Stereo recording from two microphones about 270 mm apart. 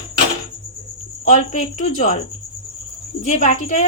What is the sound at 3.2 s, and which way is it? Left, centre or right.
Speech, left.